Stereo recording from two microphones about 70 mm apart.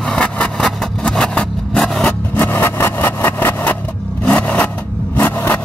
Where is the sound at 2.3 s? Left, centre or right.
Left.